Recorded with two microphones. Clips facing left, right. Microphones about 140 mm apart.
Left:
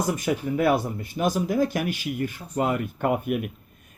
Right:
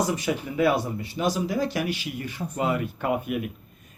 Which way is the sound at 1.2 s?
50° left (ahead or behind).